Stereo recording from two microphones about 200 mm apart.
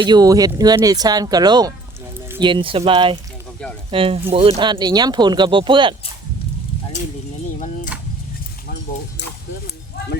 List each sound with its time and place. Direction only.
0.0 s speech: 20° right (ahead or behind)